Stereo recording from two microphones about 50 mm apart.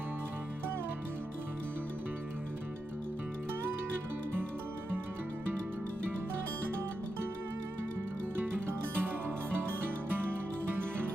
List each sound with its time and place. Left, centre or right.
9.0 s music: right